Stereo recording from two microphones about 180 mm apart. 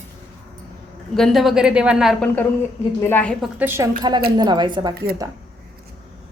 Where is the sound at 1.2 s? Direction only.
Centre (ahead or behind).